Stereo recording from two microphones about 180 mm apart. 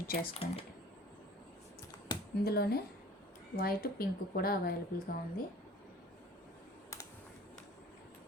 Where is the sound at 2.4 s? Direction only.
60° left (ahead or behind).